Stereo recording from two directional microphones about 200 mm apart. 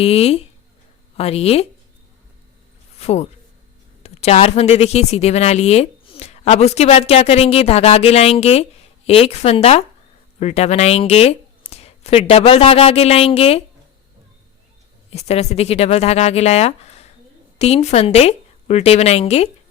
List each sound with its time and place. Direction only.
0.0 s speech: 30° left (ahead or behind)
3.0 s speech: 30° left (ahead or behind)
15.1 s speech: 30° left (ahead or behind)